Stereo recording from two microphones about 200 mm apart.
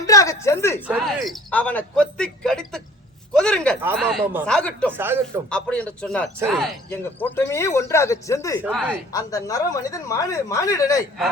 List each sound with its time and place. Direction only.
0.0 s a sound: 15° left (ahead or behind)
0.9 s speech: centre (ahead or behind)
3.8 s speech: 10° right (ahead or behind)
4.4 s speech: 5° left (ahead or behind)
4.9 s speech: 10° right (ahead or behind)
5.5 s speech: 5° left (ahead or behind)
6.9 s speech: 10° left (ahead or behind)
8.6 s speech: 5° right (ahead or behind)
9.1 s speech: 15° left (ahead or behind)